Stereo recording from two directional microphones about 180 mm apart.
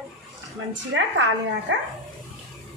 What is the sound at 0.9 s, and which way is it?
Speech, 90° right.